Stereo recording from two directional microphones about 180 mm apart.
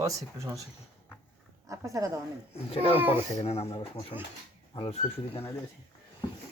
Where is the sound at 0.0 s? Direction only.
20° right (ahead or behind).